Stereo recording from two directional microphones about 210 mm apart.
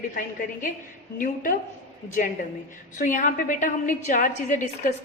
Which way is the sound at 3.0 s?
35° left (ahead or behind).